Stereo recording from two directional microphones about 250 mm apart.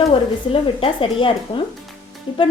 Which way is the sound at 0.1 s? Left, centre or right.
Left.